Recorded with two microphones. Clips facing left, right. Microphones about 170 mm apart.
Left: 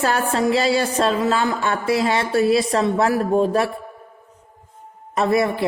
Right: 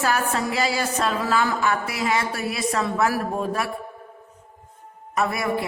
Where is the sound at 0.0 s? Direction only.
30° left (ahead or behind).